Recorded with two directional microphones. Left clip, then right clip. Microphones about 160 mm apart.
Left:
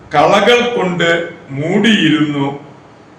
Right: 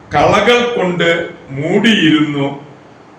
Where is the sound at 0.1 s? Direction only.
5° left (ahead or behind).